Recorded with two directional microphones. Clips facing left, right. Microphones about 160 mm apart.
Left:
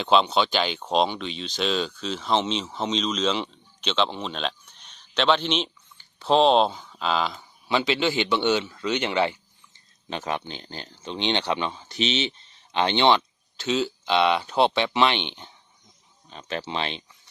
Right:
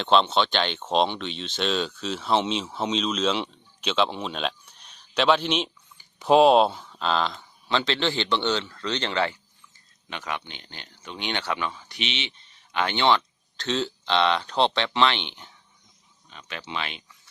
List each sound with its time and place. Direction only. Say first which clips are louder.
0.0 s speech: even; 5° left (ahead or behind)
10.1 s a man's voice: left 4 dB; 35° left (ahead or behind)
13.6 s speech: left 2 dB; 5° left (ahead or behind)
16.3 s speech: left 5 dB; 35° left (ahead or behind)